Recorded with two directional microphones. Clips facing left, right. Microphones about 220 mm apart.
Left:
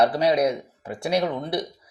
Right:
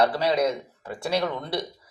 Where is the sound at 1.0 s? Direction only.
20° left (ahead or behind).